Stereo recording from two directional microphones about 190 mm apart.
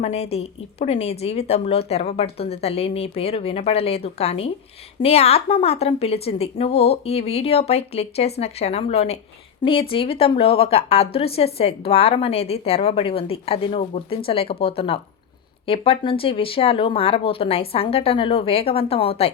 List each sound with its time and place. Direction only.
0.0 s a woman's voice: 30° left (ahead or behind)